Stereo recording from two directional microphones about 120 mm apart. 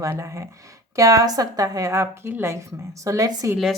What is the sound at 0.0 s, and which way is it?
A woman's voice, 25° right (ahead or behind).